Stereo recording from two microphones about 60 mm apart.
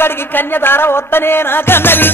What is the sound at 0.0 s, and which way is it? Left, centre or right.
Music, left.